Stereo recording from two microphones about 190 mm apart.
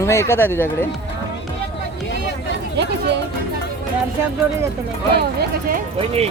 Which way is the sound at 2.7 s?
65° right (ahead or behind).